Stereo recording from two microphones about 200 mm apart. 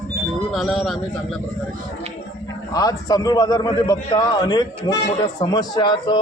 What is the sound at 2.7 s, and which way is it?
A man's voice, 20° left (ahead or behind).